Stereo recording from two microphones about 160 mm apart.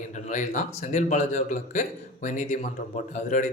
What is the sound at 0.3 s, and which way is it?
A man's voice, 50° left (ahead or behind).